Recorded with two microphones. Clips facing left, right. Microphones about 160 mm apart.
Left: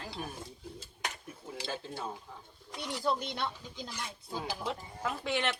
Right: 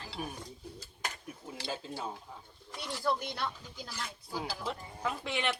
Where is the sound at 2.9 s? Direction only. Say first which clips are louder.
Even; 20° left (ahead or behind).